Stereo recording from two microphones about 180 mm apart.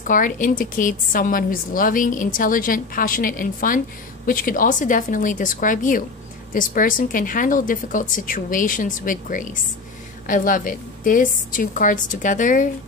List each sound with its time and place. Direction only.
0.0 s a woman's voice: 45° left (ahead or behind)